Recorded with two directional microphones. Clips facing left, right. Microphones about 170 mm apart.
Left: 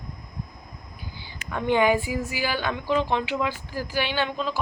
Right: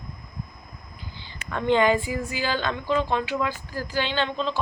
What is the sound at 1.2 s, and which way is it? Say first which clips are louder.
Speech: even; 10° left (ahead or behind).